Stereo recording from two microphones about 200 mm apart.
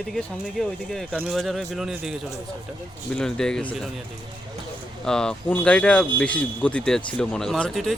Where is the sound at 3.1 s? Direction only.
5° left (ahead or behind).